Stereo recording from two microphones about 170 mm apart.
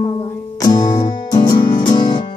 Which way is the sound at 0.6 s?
25° left (ahead or behind).